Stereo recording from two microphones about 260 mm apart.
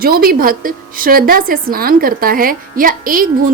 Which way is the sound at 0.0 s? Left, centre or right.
Right.